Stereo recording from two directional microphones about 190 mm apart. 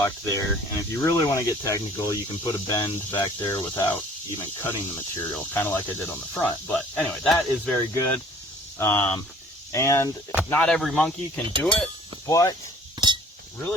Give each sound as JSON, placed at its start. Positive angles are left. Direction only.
{"t": 0.0, "sound": "speech", "side_deg": 15}
{"t": 10.5, "sound": "speech", "side_deg": 5}
{"t": 13.0, "sound": "cutlery", "side_deg": -25}